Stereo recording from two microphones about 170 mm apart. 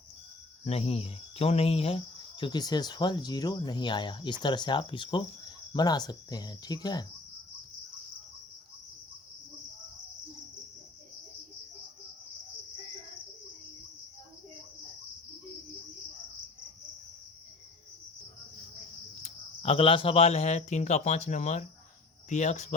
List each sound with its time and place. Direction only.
0.6 s speech: 35° left (ahead or behind)
2.4 s speech: 25° left (ahead or behind)
19.2 s speech: 35° left (ahead or behind)